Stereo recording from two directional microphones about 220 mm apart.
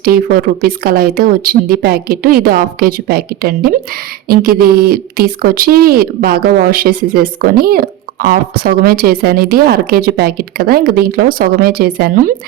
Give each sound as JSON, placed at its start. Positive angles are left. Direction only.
{"t": 0.0, "sound": "speech", "side_deg": -40}